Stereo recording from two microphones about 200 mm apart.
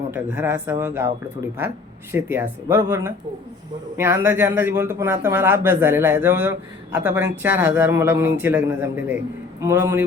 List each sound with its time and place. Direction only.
0.1 s a man's voice: 10° right (ahead or behind)
2.1 s a man's voice: 10° right (ahead or behind)